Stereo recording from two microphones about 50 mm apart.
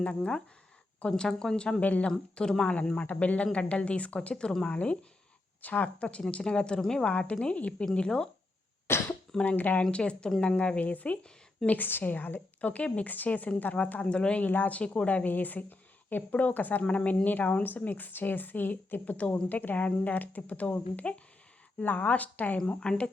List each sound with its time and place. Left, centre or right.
0.0 s speech: centre
1.8 s speech: left
2.0 s speech: centre
8.9 s cough: left
9.4 s speech: left
9.9 s speech: left
10.8 s speech: left
11.8 s speech: left
14.4 s speech: left
22.8 s speech: left